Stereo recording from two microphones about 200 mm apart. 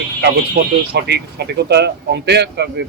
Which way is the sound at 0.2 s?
55° right (ahead or behind).